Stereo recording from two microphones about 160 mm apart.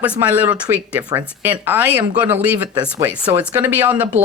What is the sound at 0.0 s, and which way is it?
Speech, 10° right (ahead or behind).